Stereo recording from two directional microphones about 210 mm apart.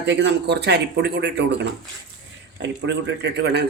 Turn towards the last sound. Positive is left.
turn(degrees=-55)  # may be behind; listen again after turning